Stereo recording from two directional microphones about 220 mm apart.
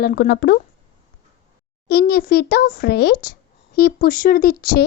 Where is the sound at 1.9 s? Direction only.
45° left (ahead or behind).